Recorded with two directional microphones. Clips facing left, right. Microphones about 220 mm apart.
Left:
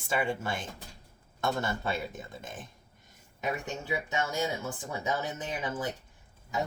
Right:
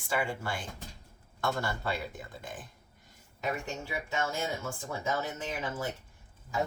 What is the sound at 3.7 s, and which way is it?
Speech, 20° left (ahead or behind).